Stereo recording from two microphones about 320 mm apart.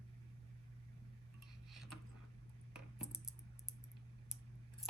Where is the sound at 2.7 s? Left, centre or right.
Centre.